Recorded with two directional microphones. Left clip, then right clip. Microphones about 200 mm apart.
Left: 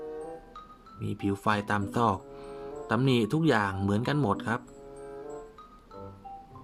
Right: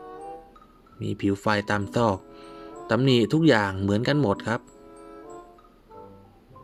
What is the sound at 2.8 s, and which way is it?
Speech, 20° right (ahead or behind).